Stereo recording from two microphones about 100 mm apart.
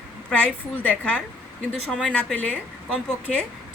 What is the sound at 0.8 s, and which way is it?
A woman's voice, 15° left (ahead or behind).